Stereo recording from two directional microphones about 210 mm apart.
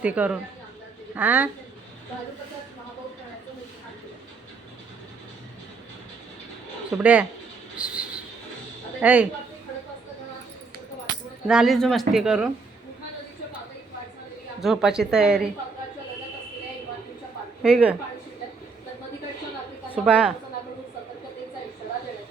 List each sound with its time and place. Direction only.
0.0 s a woman's voice: 5° right (ahead or behind)
6.9 s speech: 5° right (ahead or behind)
7.8 s a sound: 5° right (ahead or behind)
9.0 s speech: 5° right (ahead or behind)
11.4 s speech: centre (ahead or behind)
14.6 s speech: centre (ahead or behind)
17.6 s speech: 5° right (ahead or behind)
20.1 s speech: 5° right (ahead or behind)